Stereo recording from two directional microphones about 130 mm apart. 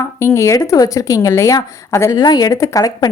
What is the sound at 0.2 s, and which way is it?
A woman's voice, 20° left (ahead or behind).